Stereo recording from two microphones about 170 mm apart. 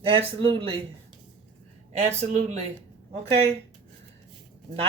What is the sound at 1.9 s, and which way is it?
Speech, 40° right (ahead or behind).